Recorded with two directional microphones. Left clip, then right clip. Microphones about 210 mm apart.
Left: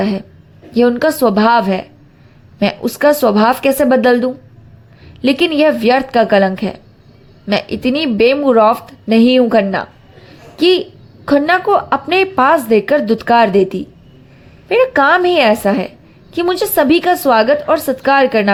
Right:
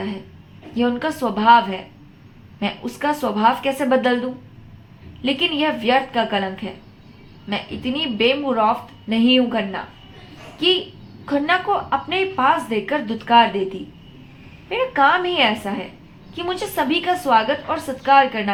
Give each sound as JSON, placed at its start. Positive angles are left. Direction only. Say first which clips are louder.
{"t": 0.7, "sound": "a woman's voice", "louder": "left 10 dB", "side_deg": 35}
{"t": 11.3, "sound": "a woman's voice", "louder": "left 8 dB", "side_deg": 40}